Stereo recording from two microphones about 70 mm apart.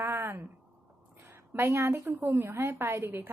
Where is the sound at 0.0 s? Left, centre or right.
Right.